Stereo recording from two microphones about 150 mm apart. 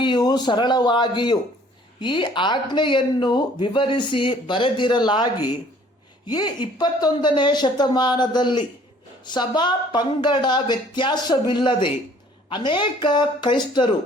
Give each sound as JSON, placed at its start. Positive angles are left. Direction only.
{"t": 0.0, "sound": "speech", "side_deg": 30}